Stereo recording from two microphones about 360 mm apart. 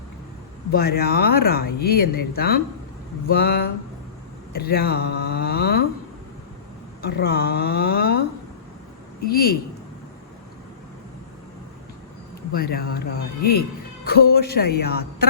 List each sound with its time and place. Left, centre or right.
0.7 s speech: left
7.0 s speech: left
9.2 s speech: left
12.5 s speech: left